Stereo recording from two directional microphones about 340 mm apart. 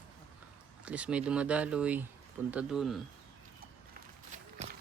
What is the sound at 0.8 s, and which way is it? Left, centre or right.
Speech, centre.